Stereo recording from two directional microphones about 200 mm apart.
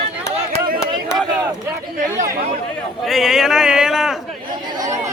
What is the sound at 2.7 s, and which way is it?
A man's voice, centre (ahead or behind).